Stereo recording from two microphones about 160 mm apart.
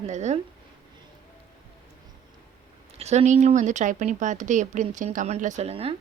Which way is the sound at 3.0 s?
45° right (ahead or behind).